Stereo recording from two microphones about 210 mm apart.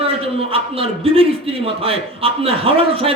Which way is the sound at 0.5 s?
25° right (ahead or behind).